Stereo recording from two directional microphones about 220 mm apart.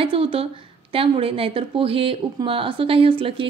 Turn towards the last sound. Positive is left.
turn(degrees=-25)  # may be behind; listen again after turning